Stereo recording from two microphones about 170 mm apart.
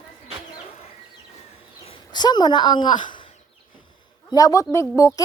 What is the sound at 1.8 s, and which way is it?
Speech, 25° left (ahead or behind).